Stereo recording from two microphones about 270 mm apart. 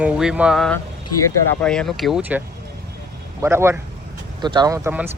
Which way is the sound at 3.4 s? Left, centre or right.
Centre.